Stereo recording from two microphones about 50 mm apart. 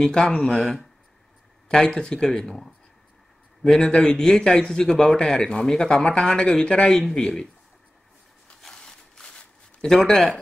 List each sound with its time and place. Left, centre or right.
0.0 s speech: centre
1.9 s speech: centre
8.5 s a sound: centre
10.1 s speech: centre